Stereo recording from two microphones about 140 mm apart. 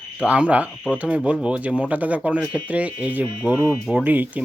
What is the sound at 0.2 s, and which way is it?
Speech, 10° right (ahead or behind).